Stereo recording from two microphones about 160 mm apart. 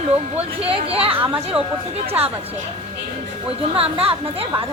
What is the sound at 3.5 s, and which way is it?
Speech, 35° right (ahead or behind).